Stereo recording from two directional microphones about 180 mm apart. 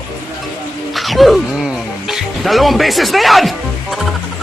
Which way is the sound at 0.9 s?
Centre (ahead or behind).